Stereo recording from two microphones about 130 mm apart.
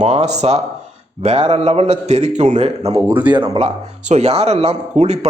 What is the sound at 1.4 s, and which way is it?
Speech, 50° right (ahead or behind).